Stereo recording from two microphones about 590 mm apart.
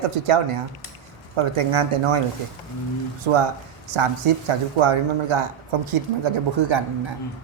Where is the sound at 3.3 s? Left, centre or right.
Right.